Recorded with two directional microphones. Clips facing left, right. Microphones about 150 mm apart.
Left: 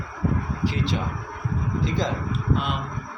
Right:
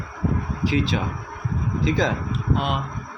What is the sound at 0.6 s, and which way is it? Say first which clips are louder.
Speech: right 6 dB; 90° right.